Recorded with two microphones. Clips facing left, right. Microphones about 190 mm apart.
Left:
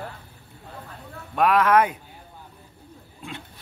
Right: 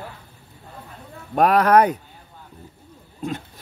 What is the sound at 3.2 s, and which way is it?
Speech, 40° right (ahead or behind).